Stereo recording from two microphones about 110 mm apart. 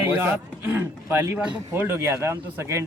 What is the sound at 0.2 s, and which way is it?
A man's voice, 20° right (ahead or behind).